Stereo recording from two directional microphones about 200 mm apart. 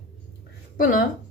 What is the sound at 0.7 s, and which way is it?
Speech, 40° left (ahead or behind).